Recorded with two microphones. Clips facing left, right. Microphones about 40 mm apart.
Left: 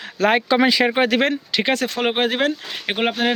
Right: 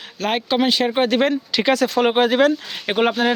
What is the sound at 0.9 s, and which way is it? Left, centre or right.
Speech, left.